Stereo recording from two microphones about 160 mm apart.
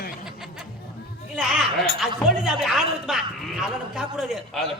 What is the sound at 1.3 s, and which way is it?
Speech, centre (ahead or behind).